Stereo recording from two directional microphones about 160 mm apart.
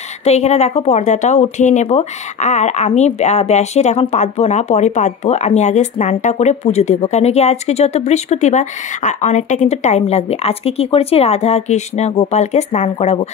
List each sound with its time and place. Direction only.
0.2 s speech: 45° left (ahead or behind)